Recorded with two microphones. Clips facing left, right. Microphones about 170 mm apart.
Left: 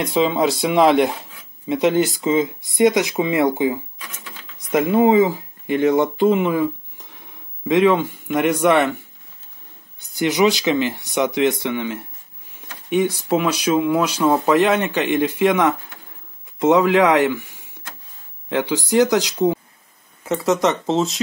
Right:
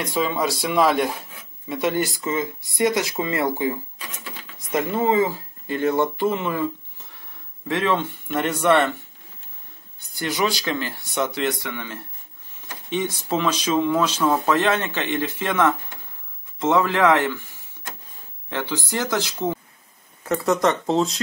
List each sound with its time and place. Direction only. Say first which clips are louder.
0.0 s speech: left 5 dB; 20° left (ahead or behind)
10.1 s speech: left 7 dB; 20° left (ahead or behind)
13.3 s speech: left 2 dB; 10° left (ahead or behind)
18.5 s speech: left 7 dB; 15° left (ahead or behind)
20.3 s speech: left 2 dB; centre (ahead or behind)
20.6 s speech: left 1 dB; 20° left (ahead or behind)